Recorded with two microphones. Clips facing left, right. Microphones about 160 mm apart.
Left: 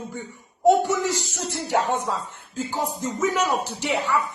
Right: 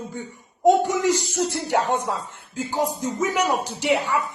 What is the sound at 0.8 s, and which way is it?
A man's voice, 15° right (ahead or behind).